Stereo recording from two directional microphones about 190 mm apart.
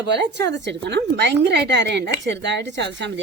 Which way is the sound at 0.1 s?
65° right (ahead or behind).